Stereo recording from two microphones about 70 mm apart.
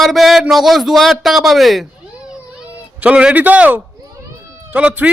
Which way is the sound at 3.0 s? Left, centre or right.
Centre.